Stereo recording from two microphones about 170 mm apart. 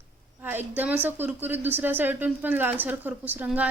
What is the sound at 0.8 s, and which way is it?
Speech, 10° right (ahead or behind).